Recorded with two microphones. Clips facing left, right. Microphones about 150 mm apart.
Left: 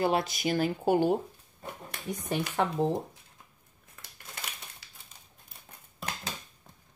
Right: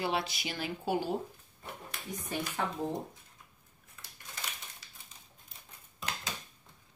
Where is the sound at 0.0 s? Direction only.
45° left (ahead or behind).